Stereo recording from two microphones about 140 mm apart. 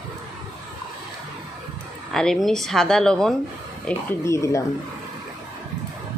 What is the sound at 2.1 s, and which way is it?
Speech, 5° left (ahead or behind).